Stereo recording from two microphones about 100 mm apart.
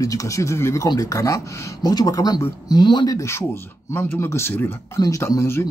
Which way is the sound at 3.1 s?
30° left (ahead or behind).